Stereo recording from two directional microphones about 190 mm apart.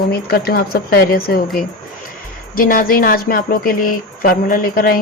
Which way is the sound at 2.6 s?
50° left (ahead or behind).